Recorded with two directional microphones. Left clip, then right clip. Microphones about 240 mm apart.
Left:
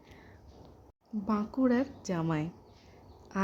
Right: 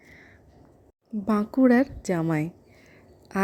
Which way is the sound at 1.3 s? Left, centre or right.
Right.